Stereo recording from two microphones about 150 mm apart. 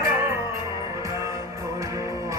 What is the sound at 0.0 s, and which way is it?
Music, 15° right (ahead or behind).